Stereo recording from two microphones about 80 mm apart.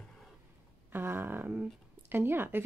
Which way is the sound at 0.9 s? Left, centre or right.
Right.